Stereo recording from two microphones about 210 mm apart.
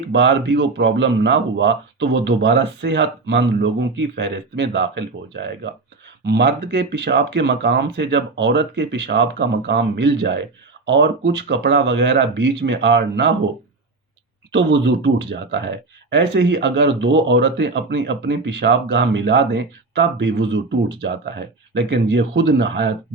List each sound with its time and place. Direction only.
0.1 s speech: 60° right (ahead or behind)
14.5 s speech: 60° right (ahead or behind)